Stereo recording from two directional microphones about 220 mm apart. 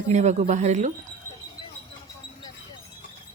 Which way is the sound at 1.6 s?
20° left (ahead or behind).